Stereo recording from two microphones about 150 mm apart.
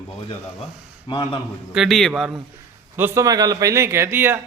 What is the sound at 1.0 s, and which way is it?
Speech, 30° left (ahead or behind).